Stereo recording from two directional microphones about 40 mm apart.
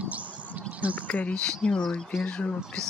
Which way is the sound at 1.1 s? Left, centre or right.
Left.